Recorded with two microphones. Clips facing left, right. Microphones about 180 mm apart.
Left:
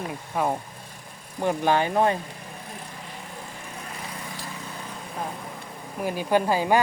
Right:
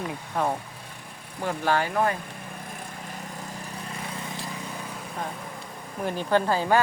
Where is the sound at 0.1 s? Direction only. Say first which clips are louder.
Left 2 dB; 10° left (ahead or behind).